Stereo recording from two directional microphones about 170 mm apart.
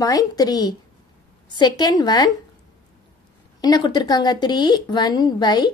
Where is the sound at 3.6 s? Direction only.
25° left (ahead or behind).